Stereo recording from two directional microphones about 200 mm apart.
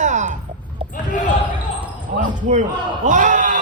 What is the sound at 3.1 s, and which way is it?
Speech, 40° right (ahead or behind).